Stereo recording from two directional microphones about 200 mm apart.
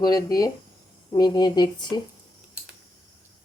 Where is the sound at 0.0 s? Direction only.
20° left (ahead or behind).